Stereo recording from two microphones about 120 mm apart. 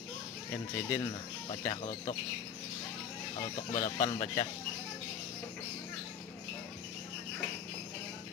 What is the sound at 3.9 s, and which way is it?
Speech, 40° left (ahead or behind).